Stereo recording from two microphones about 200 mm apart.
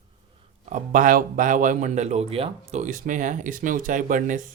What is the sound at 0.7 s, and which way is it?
A man's voice, 40° right (ahead or behind).